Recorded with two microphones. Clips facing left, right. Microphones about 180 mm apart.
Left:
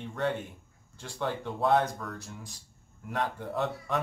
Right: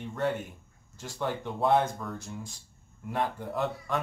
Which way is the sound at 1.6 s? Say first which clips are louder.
Right 1 dB; 5° right (ahead or behind).